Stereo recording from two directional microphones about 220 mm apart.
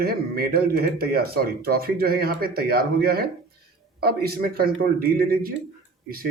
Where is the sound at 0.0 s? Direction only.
45° right (ahead or behind).